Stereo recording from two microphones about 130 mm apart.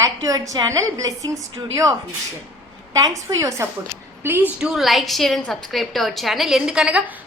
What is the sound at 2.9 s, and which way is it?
Speech, 25° right (ahead or behind).